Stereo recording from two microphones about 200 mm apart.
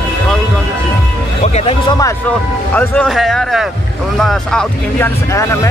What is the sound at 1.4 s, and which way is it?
Speech, 30° left (ahead or behind).